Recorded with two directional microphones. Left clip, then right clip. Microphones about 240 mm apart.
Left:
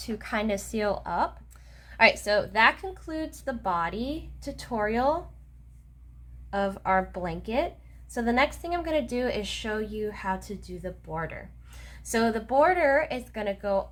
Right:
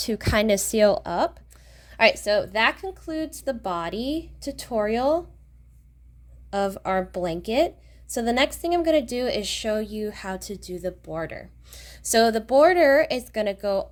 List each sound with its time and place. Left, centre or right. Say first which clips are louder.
0.0 s a woman's voice: right 7 dB; right
6.5 s a woman's voice: right 1 dB; right